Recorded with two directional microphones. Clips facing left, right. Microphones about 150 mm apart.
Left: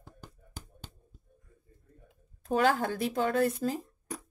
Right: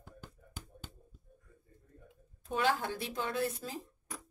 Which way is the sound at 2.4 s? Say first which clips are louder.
Left 6 dB; 45° left (ahead or behind).